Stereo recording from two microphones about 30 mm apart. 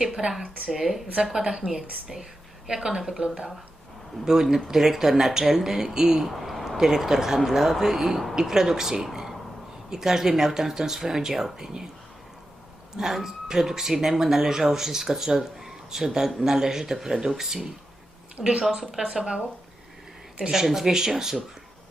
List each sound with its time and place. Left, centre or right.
0.1 s speech: right
0.7 s speech: centre
2.7 s a woman's voice: right
3.1 s speech: right
6.2 s a sound: centre
6.7 s speech: centre
13.0 s speech: centre
18.7 s speech: centre
20.7 s speech: centre